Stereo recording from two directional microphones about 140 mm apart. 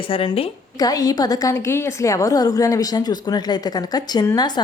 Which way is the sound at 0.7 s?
25° left (ahead or behind).